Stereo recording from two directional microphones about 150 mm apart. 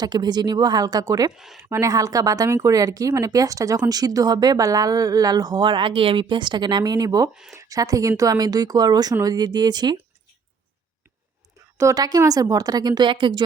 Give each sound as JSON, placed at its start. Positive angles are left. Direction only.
{"t": 0.0, "sound": "speech", "side_deg": -30}
{"t": 1.4, "sound": "speech", "side_deg": 0}
{"t": 1.7, "sound": "speech", "side_deg": -20}
{"t": 11.8, "sound": "speech", "side_deg": -25}